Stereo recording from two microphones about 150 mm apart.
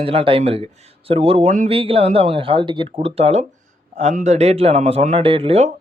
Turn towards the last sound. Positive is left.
turn(degrees=-45)  # may be behind; listen again after turning